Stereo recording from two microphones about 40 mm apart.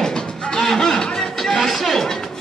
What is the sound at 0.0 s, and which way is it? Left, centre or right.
Music, centre.